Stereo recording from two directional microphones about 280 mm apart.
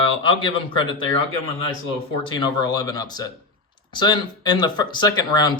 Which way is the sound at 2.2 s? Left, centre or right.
Centre.